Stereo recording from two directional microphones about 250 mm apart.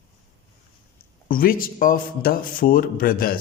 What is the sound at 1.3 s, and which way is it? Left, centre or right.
Speech, left.